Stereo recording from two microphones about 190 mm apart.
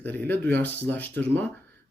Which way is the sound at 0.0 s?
10° left (ahead or behind).